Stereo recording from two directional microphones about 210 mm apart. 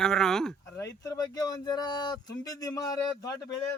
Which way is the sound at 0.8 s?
15° left (ahead or behind).